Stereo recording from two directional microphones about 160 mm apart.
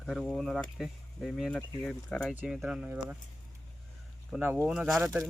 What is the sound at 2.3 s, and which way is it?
Speech, 10° right (ahead or behind).